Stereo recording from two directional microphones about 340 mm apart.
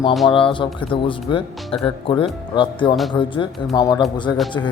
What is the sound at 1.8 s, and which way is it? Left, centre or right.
Speech, centre.